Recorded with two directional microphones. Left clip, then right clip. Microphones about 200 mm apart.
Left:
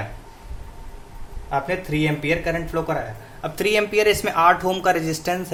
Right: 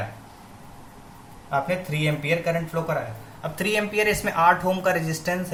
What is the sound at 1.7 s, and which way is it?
A man's voice, 45° left (ahead or behind).